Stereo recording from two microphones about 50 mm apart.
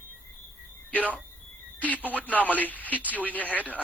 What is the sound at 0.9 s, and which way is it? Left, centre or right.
Speech, left.